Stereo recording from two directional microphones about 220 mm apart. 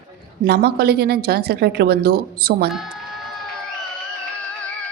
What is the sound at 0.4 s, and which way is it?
A woman's voice, 45° right (ahead or behind).